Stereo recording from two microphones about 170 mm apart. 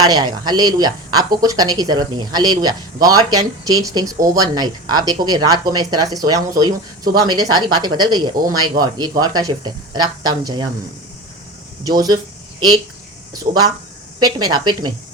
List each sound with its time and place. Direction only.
0.0 s speech: 25° right (ahead or behind)
11.8 s speech: 25° right (ahead or behind)
14.3 s speech: 25° right (ahead or behind)